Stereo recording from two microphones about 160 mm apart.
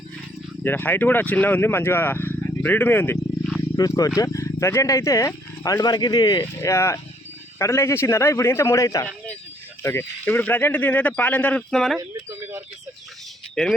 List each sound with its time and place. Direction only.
0.6 s speech: 10° left (ahead or behind)
11.9 s a sound: 20° right (ahead or behind)
13.6 s speech: centre (ahead or behind)